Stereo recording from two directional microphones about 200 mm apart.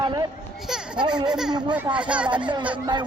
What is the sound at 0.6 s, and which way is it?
Children playing, 5° right (ahead or behind).